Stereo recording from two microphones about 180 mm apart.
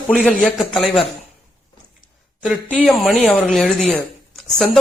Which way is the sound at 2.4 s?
Centre (ahead or behind).